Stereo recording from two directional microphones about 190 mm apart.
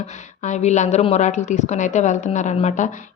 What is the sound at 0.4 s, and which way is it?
A woman's voice, 40° left (ahead or behind).